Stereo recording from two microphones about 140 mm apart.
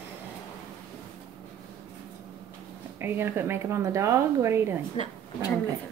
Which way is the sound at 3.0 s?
15° right (ahead or behind).